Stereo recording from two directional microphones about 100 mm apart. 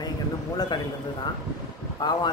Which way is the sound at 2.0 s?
45° left (ahead or behind).